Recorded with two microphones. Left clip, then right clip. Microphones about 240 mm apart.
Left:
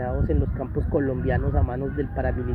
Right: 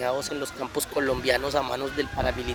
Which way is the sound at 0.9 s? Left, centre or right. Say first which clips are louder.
Right 1 dB; right.